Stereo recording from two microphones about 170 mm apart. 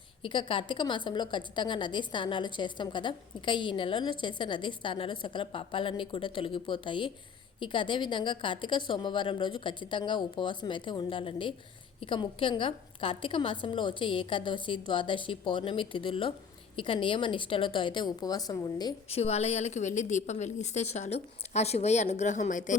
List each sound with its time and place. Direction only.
0.2 s a woman's voice: 30° left (ahead or behind)
19.0 s a woman's voice: 35° left (ahead or behind)